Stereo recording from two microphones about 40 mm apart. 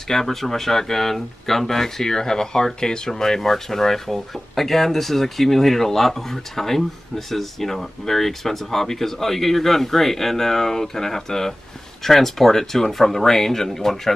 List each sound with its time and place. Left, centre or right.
0.1 s speech: centre